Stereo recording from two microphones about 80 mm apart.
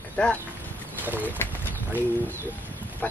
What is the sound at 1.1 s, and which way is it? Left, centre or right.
Bird, right.